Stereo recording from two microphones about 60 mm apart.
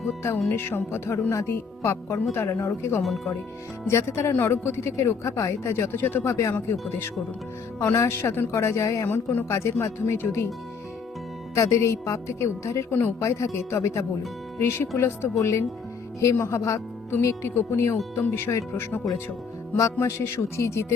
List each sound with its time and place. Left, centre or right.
0.5 s a woman's voice: left
3.0 s speech: centre
3.8 s a woman's voice: left
5.7 s speech: left
6.2 s a woman's voice: left
9.0 s speech: left
9.5 s a woman's voice: left
11.5 s a woman's voice: left
12.9 s a woman's voice: left
17.1 s a woman's voice: left
19.7 s a woman's voice: left